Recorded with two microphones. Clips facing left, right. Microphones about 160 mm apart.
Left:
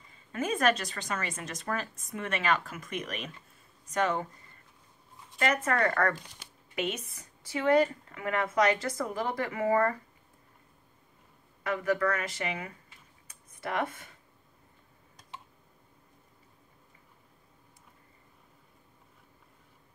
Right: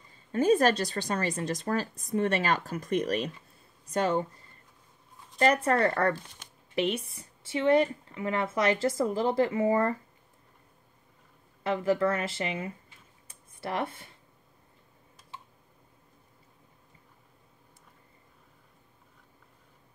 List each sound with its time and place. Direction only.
0.1 s a woman's voice: 35° right (ahead or behind)
5.4 s a woman's voice: 30° right (ahead or behind)
11.6 s speech: 25° right (ahead or behind)